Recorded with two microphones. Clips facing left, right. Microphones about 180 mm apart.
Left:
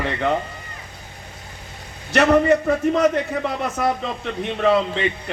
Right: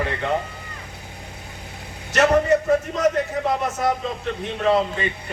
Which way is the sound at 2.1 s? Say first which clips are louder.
Left 1 dB; 60° left (ahead or behind).